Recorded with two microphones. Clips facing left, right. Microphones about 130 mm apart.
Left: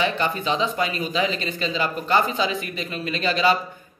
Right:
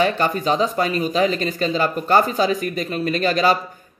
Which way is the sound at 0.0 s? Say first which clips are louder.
Right 4 dB; 45° right (ahead or behind).